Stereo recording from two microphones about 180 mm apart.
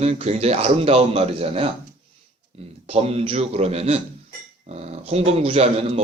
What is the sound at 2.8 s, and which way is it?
Speech, 35° right (ahead or behind).